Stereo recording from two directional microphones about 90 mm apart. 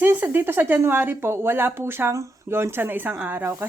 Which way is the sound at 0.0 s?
20° right (ahead or behind).